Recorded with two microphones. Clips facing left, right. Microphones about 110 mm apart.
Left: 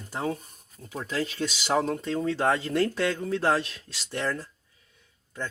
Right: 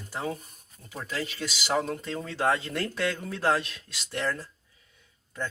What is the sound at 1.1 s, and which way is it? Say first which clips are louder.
Speech: left 4 dB; 35° left (ahead or behind).